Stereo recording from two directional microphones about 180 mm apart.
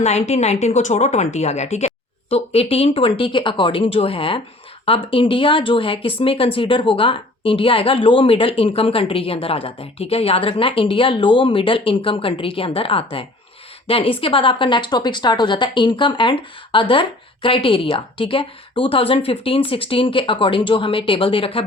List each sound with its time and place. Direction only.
0.0 s speech: 40° left (ahead or behind)